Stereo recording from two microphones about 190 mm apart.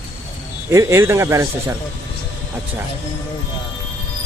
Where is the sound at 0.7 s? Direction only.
15° right (ahead or behind).